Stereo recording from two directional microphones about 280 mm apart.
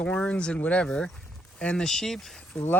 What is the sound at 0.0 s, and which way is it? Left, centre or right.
Speech, centre.